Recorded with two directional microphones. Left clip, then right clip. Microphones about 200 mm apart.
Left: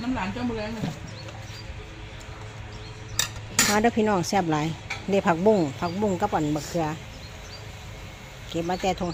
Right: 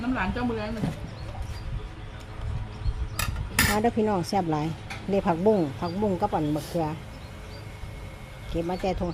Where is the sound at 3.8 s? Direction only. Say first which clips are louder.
Left 2 dB; 5° left (ahead or behind).